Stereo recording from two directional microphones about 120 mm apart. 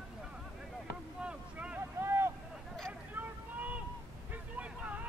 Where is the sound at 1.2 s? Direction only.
10° right (ahead or behind).